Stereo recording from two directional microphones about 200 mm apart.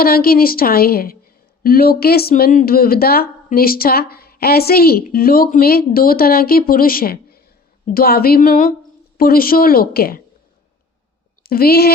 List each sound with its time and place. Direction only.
0.0 s speech: 50° left (ahead or behind)
11.4 s speech: 50° left (ahead or behind)